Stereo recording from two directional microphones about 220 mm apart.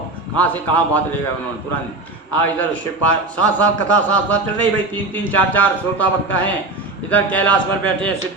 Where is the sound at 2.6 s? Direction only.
5° left (ahead or behind).